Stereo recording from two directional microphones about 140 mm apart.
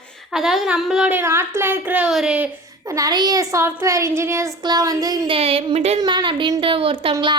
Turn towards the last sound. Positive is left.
turn(degrees=-40)  # may be behind; listen again after turning